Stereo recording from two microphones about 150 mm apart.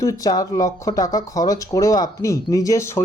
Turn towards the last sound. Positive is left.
turn(degrees=20)  # may be behind; listen again after turning